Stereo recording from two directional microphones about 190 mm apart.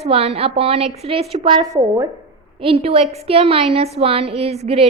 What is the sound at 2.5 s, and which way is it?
A woman's voice, 30° right (ahead or behind).